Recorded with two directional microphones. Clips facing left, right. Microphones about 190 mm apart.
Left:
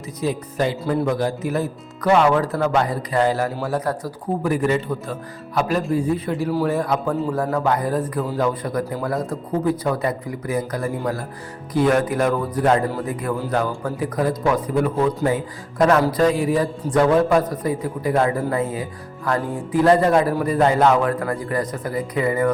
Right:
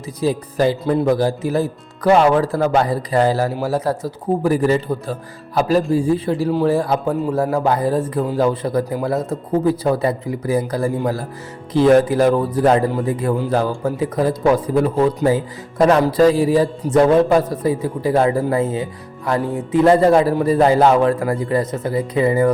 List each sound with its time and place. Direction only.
0.2 s a man's voice: 35° right (ahead or behind)